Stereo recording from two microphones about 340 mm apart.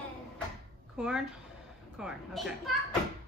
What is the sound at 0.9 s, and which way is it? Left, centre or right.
A child's voice, centre.